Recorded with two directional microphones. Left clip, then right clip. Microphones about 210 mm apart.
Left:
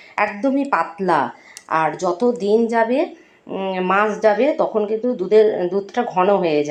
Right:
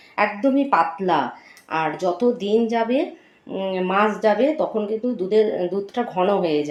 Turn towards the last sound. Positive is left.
turn(degrees=5)  # may be behind; listen again after turning